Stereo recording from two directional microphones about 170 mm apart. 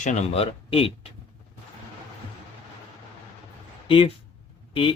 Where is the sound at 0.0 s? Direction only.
45° left (ahead or behind).